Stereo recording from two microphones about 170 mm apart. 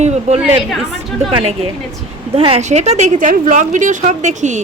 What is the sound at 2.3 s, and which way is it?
Speech, 35° right (ahead or behind).